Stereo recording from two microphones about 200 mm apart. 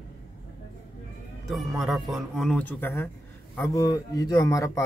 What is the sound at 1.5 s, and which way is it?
A man's voice, centre (ahead or behind).